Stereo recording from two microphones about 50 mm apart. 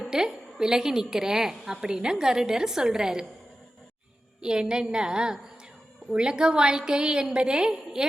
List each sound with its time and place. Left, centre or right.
0.1 s a woman's voice: centre
4.4 s a woman's voice: centre